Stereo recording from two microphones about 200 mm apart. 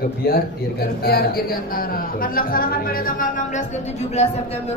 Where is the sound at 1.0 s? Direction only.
50° left (ahead or behind).